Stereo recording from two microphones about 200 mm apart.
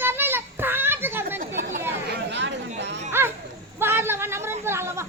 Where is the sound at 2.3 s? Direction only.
60° right (ahead or behind).